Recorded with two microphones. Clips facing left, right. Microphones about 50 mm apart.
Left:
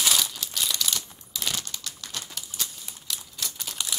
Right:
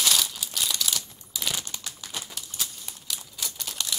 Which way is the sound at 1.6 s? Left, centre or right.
Centre.